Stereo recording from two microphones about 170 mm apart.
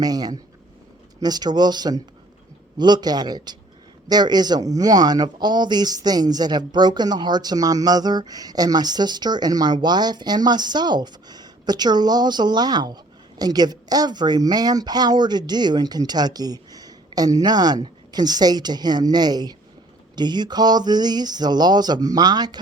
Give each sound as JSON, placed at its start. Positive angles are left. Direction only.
{"t": 0.0, "sound": "speech", "side_deg": -20}